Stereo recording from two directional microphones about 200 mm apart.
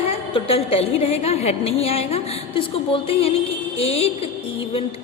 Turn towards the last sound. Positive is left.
turn(degrees=30)  # may be behind; listen again after turning